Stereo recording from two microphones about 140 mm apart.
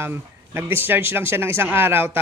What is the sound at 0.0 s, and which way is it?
Speech, 15° right (ahead or behind).